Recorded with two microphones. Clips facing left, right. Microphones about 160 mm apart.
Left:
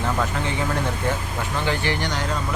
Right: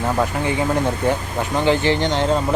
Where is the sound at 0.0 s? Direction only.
15° right (ahead or behind).